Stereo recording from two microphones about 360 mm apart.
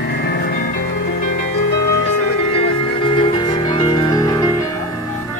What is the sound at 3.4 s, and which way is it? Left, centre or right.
Music, centre.